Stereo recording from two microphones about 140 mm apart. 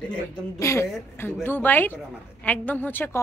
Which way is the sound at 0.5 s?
20° left (ahead or behind).